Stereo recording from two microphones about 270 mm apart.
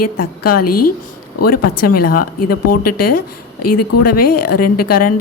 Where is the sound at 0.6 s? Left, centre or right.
Left.